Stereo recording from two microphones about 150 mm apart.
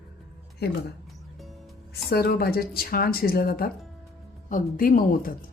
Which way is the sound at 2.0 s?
90° left.